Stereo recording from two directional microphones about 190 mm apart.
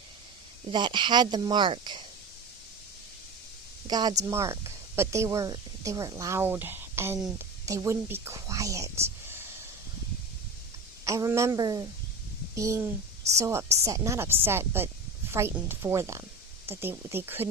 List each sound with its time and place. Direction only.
0.7 s speech: 25° right (ahead or behind)
3.8 s speech: 20° right (ahead or behind)
7.2 s whispering: 15° right (ahead or behind)
11.0 s speech: 15° right (ahead or behind)